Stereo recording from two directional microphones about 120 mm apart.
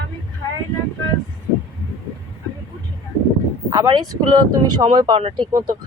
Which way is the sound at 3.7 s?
35° right (ahead or behind).